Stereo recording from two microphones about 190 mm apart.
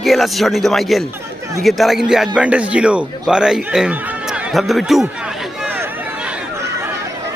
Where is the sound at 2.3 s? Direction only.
5° right (ahead or behind).